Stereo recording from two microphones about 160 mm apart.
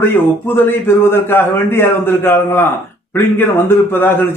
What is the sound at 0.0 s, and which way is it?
A man's voice, 15° left (ahead or behind).